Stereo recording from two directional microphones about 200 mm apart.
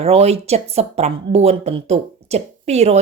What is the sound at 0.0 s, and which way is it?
A woman's voice, 30° right (ahead or behind).